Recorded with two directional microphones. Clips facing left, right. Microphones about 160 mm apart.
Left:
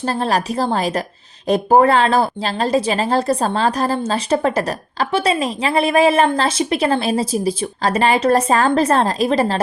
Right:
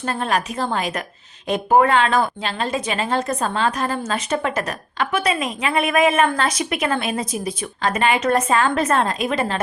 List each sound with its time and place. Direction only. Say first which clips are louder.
0.0 s speech: left 3 dB; 35° left (ahead or behind)